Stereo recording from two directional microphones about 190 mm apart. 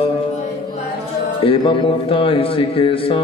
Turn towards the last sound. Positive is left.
turn(degrees=30)  # may be behind; listen again after turning